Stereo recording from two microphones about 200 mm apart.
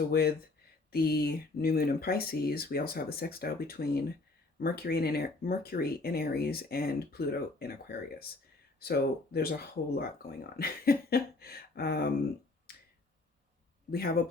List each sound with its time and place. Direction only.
0.1 s speech: 50° left (ahead or behind)
12.7 s finger snapping: 50° left (ahead or behind)